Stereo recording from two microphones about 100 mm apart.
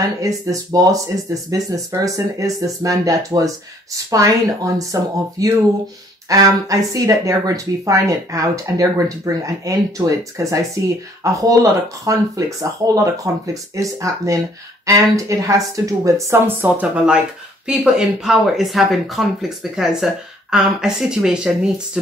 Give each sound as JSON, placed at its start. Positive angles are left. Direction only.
{"t": 0.2, "sound": "speech", "side_deg": -35}